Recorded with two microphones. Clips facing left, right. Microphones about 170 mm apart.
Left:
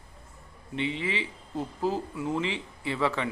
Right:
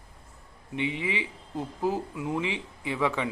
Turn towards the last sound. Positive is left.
turn(degrees=-15)  # may be behind; listen again after turning